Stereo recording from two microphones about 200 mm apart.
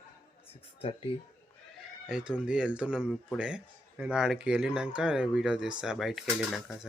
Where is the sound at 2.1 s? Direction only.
5° right (ahead or behind).